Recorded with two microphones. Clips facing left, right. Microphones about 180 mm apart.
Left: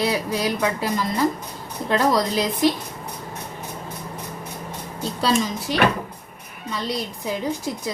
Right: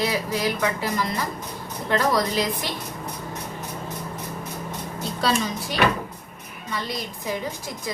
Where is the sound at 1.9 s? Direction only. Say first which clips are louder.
Left 2 dB; 20° left (ahead or behind).